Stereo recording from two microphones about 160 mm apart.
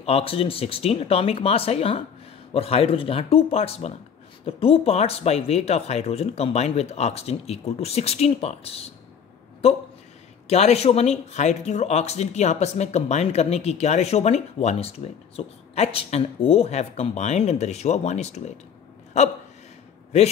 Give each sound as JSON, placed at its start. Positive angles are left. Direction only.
{"t": 0.0, "sound": "speech", "side_deg": 35}
{"t": 10.4, "sound": "speech", "side_deg": 40}